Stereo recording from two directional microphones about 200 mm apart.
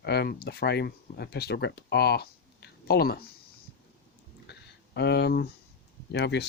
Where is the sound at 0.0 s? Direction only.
55° left (ahead or behind).